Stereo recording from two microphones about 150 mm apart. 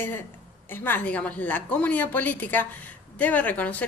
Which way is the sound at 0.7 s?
15° left (ahead or behind).